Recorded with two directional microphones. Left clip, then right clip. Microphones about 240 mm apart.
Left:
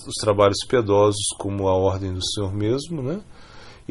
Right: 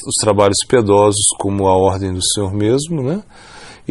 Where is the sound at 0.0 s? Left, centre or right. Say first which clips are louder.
Right 5 dB; right.